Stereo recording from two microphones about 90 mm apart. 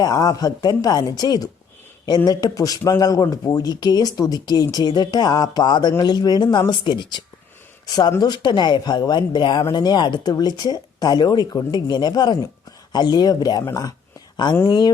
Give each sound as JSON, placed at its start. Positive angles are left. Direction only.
{"t": 0.0, "sound": "speech", "side_deg": 45}
{"t": 7.9, "sound": "speech", "side_deg": 50}
{"t": 14.7, "sound": "speech", "side_deg": 50}